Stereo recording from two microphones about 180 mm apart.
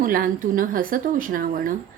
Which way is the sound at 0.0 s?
50° right (ahead or behind).